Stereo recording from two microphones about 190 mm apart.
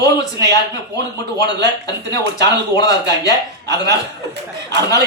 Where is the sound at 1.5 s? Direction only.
65° right (ahead or behind).